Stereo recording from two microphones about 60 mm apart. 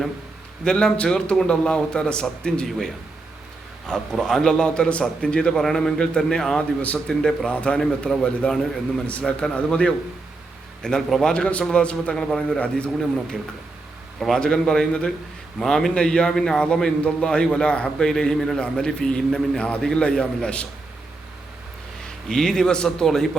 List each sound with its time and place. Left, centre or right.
0.6 s a man's voice: centre
2.6 s a man's voice: centre
14.2 s a man's voice: centre
22.3 s a man's voice: centre